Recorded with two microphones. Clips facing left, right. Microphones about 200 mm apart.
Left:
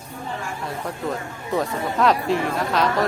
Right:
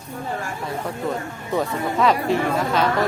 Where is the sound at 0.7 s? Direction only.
Centre (ahead or behind).